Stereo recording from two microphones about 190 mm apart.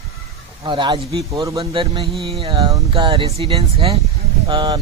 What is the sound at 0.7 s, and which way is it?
Speech, 25° right (ahead or behind).